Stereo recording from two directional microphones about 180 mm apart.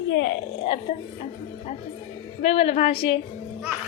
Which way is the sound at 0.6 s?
35° left (ahead or behind).